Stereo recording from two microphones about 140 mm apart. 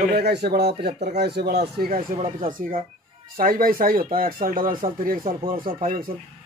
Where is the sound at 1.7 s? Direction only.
90° right.